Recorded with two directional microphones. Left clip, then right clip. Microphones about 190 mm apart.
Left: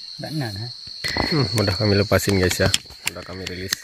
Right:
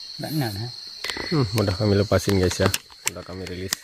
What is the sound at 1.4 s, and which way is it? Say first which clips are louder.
Cricket: left 2 dB; 20° left (ahead or behind).